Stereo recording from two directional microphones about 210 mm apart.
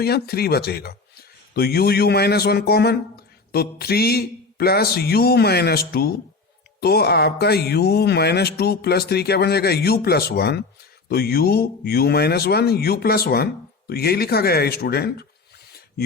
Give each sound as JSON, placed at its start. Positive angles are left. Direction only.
{"t": 0.0, "sound": "speech", "side_deg": 50}